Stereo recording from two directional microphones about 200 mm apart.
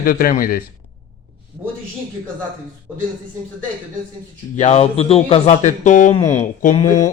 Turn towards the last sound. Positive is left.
turn(degrees=35)  # may be behind; listen again after turning